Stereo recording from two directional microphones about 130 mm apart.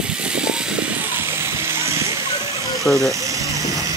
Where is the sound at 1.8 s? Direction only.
20° right (ahead or behind).